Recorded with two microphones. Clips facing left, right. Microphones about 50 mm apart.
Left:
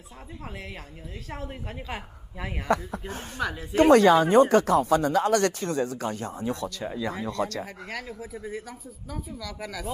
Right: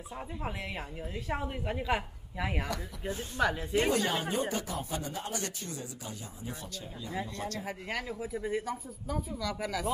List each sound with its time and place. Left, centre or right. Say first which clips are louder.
1.3 s speech: right 3 dB; centre
1.8 s a woman's voice: right 5 dB; centre
2.7 s speech: left 10 dB; left
3.4 s a woman's voice: right 1 dB; centre
3.8 s speech: left 16 dB; left
7.2 s speech: left 9 dB; left
7.6 s a woman's voice: even; centre